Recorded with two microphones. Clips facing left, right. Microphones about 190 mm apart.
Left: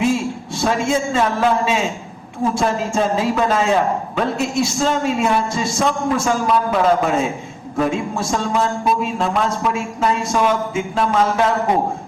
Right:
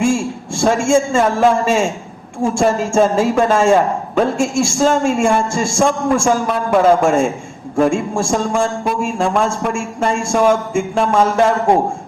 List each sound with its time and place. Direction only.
0.0 s a man's voice: 50° right (ahead or behind)